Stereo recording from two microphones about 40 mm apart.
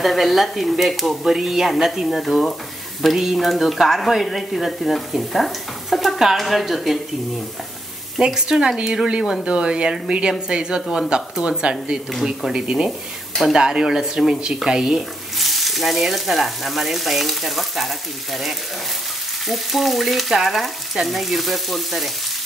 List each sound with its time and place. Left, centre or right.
0.0 s frying: centre
3.0 s speech: centre
3.3 s frying: centre
8.4 s speech: centre
12.5 s speech: centre
15.3 s frying: centre